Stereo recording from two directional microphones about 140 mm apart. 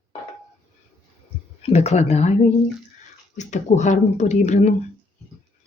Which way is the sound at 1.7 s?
50° left (ahead or behind).